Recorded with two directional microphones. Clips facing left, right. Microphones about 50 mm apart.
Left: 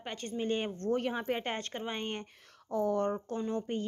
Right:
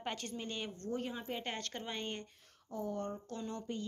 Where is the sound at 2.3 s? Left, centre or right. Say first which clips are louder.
Left 10 dB; left.